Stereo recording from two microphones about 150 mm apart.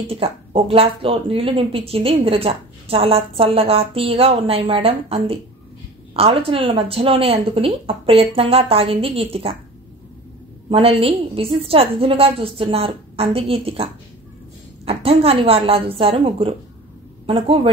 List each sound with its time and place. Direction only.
0.1 s speech: 40° right (ahead or behind)
10.7 s speech: 40° right (ahead or behind)
14.9 s speech: 40° right (ahead or behind)